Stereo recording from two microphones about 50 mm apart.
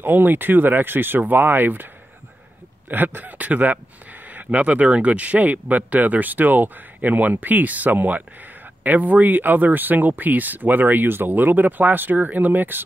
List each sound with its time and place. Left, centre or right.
0.0 s speech: right
2.9 s speech: right